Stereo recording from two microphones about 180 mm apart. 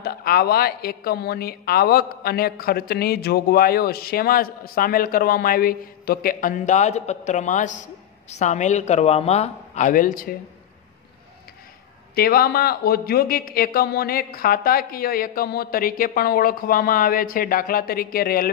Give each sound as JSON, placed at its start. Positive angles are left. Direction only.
{"t": 0.0, "sound": "speech", "side_deg": 55}
{"t": 12.2, "sound": "speech", "side_deg": 55}